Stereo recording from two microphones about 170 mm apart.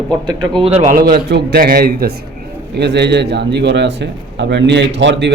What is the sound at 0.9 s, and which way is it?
A man's voice, 60° right (ahead or behind).